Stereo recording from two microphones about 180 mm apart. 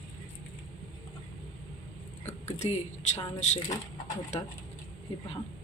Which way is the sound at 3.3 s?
40° left (ahead or behind).